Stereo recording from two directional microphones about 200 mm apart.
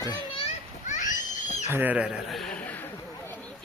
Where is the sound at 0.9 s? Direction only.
40° left (ahead or behind).